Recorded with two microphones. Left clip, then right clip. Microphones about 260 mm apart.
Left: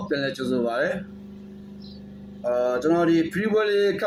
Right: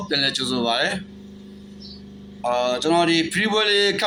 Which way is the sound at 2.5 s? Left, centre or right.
Centre.